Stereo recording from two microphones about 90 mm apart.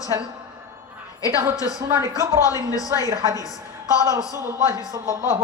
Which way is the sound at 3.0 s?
40° right (ahead or behind).